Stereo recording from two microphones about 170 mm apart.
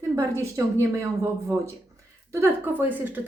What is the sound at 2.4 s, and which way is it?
Speech, 10° right (ahead or behind).